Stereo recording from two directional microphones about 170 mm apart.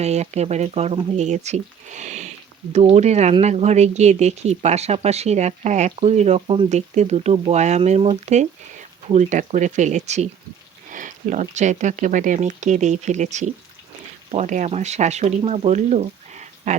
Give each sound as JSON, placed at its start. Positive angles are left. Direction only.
{"t": 0.0, "sound": "speech", "side_deg": -40}